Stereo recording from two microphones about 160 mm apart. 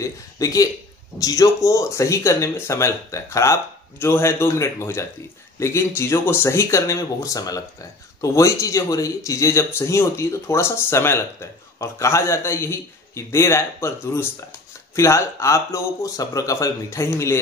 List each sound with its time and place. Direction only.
0.0 s a man's voice: 20° left (ahead or behind)
15.0 s speech: 20° left (ahead or behind)